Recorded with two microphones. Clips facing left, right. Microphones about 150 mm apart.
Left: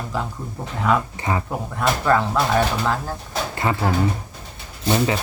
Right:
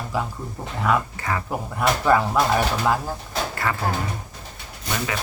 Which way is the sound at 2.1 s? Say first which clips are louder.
Even; 10° right (ahead or behind).